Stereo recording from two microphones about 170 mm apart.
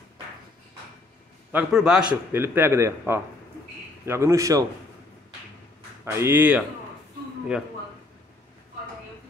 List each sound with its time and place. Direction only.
1.5 s a man's voice: 5° right (ahead or behind)
6.0 s a man's voice: 15° right (ahead or behind)